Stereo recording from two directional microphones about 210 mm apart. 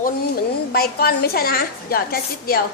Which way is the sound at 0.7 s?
45° left (ahead or behind).